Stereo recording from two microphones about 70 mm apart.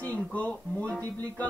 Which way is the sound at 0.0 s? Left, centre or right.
Left.